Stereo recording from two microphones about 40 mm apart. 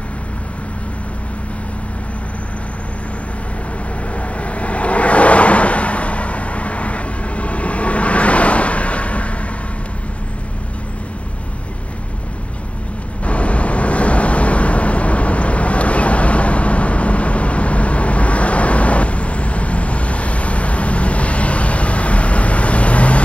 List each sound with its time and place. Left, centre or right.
4.1 s vehicle: left
13.2 s vehicle: left